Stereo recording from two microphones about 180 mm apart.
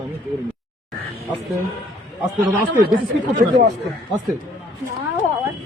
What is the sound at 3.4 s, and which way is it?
Speech, 65° right (ahead or behind).